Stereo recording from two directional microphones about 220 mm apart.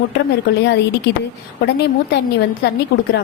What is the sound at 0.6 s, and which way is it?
A woman's voice, 50° left (ahead or behind).